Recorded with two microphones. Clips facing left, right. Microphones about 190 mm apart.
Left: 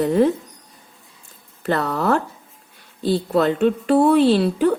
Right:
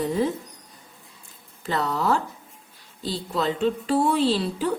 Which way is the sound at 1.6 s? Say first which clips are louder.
Left 4 dB; 60° left (ahead or behind).